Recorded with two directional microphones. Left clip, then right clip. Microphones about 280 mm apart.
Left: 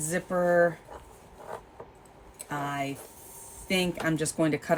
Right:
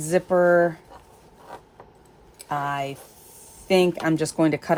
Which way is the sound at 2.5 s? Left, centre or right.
Right.